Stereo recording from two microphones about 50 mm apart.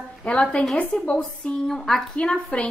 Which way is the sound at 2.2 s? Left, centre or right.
Centre.